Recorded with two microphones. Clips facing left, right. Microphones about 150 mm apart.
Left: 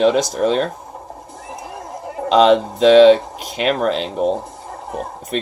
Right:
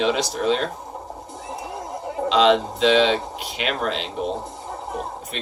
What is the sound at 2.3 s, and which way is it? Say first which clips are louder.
Speech: left 5 dB; 45° left (ahead or behind).